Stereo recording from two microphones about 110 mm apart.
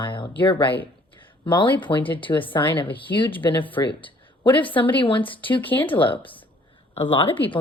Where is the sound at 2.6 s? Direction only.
15° left (ahead or behind).